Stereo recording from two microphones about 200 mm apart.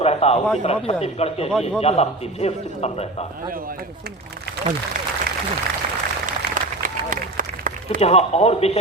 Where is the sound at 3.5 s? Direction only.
45° right (ahead or behind).